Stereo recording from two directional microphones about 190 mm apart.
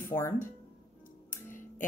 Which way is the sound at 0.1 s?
10° left (ahead or behind).